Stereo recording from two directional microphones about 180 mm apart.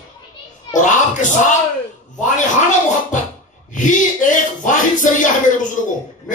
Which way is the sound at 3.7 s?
45° left (ahead or behind).